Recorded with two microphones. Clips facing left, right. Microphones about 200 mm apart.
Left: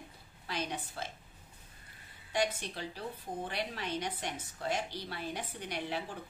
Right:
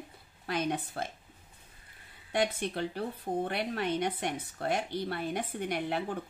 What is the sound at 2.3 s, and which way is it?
A woman's voice, 55° right (ahead or behind).